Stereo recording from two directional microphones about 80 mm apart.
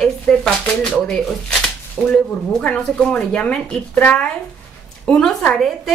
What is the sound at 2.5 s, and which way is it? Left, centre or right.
A woman's voice, centre.